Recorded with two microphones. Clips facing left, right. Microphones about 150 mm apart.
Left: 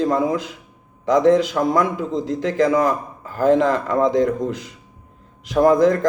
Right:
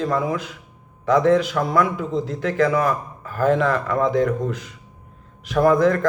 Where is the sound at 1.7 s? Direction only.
20° left (ahead or behind).